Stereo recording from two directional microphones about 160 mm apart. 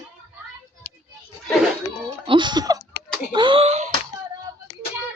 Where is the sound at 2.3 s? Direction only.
30° right (ahead or behind).